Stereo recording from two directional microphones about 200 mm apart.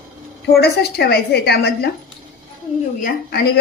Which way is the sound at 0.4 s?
55° left (ahead or behind).